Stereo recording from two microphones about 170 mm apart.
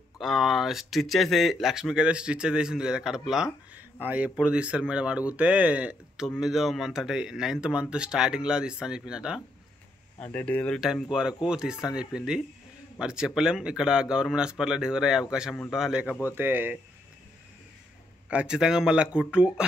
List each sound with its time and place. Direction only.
0.2 s speech: centre (ahead or behind)
10.2 s speech: 10° left (ahead or behind)
10.8 s speech: centre (ahead or behind)
18.3 s speech: 5° right (ahead or behind)